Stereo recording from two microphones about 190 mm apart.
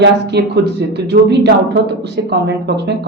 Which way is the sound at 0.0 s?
60° right (ahead or behind).